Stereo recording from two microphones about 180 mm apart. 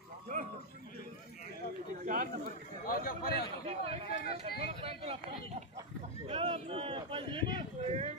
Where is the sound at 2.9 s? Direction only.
55° left (ahead or behind).